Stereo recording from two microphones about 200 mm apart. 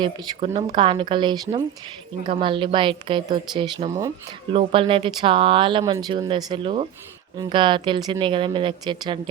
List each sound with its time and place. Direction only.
0.0 s speech: 30° right (ahead or behind)